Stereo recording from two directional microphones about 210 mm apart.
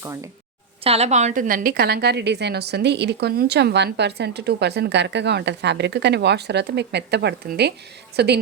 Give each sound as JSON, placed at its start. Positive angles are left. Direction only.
{"t": 0.9, "sound": "a woman's voice", "side_deg": -30}